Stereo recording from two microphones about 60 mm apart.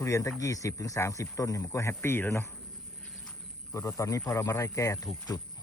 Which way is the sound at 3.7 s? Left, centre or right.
Left.